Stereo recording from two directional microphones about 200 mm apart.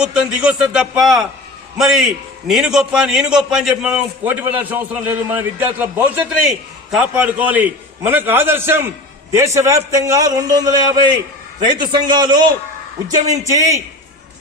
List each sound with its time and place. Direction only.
0.0 s a man's voice: 5° right (ahead or behind)
9.9 s a man's voice: 15° right (ahead or behind)